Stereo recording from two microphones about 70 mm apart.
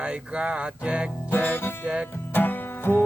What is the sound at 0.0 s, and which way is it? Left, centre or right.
Music, centre.